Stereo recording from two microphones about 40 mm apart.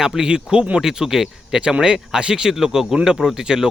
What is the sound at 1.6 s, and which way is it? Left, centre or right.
A man's voice, right.